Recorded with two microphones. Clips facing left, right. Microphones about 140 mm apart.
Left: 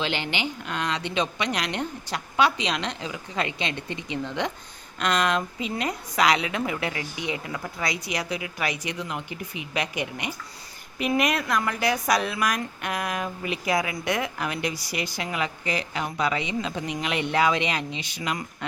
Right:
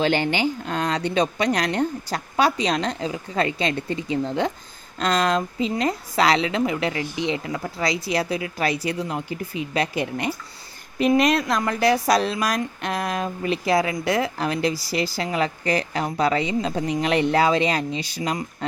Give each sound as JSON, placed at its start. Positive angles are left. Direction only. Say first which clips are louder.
{"t": 0.0, "sound": "a woman's voice", "louder": "right 8 dB", "side_deg": -45}
{"t": 9.9, "sound": "speech", "louder": "right 6 dB", "side_deg": 15}
{"t": 11.2, "sound": "a woman's voice", "louder": "right 4 dB", "side_deg": -35}